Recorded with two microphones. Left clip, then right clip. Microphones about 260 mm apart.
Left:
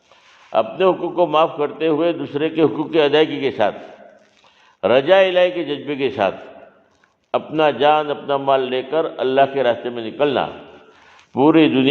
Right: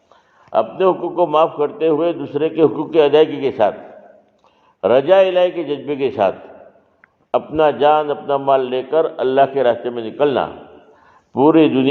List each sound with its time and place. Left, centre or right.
0.5 s a man's voice: left
4.8 s a man's voice: left